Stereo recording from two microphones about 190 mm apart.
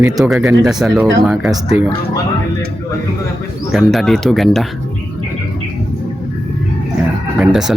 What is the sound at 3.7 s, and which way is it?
Speech, centre (ahead or behind).